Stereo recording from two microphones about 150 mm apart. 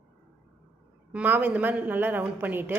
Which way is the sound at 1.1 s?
10° right (ahead or behind).